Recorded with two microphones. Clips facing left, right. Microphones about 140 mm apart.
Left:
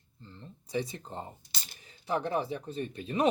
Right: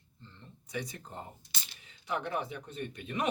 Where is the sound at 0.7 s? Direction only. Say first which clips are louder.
Left 5 dB; 30° left (ahead or behind).